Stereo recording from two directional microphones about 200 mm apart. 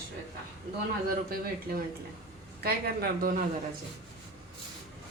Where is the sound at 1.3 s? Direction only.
50° right (ahead or behind).